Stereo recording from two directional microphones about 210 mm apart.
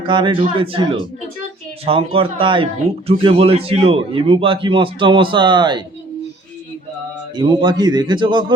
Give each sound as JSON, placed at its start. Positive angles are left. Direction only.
{"t": 0.0, "sound": "a man's voice", "side_deg": -25}
{"t": 7.3, "sound": "a man's voice", "side_deg": -20}